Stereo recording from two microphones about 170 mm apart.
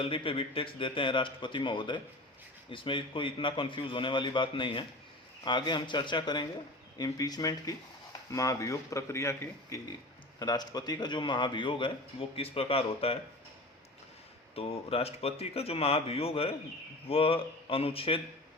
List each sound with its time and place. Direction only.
0.0 s a man's voice: 30° left (ahead or behind)
14.5 s speech: 35° left (ahead or behind)